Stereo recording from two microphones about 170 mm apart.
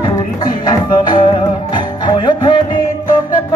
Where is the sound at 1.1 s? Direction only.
25° left (ahead or behind).